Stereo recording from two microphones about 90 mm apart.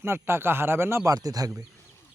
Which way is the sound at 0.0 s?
25° right (ahead or behind).